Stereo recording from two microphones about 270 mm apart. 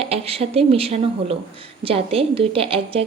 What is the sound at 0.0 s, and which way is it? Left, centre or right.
Speech, right.